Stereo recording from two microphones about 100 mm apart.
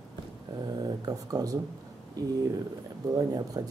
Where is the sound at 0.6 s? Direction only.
45° right (ahead or behind).